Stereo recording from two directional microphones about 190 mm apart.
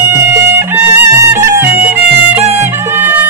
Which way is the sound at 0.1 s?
15° right (ahead or behind).